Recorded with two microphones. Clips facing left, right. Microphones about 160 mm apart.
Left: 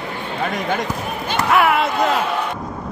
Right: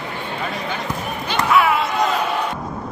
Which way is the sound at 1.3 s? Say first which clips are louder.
Even; 55° left (ahead or behind).